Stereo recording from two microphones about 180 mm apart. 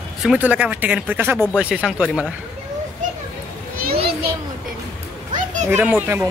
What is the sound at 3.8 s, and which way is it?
Children playing, 60° right (ahead or behind).